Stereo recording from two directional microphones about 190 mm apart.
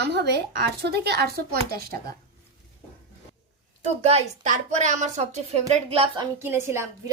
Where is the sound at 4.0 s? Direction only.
35° right (ahead or behind).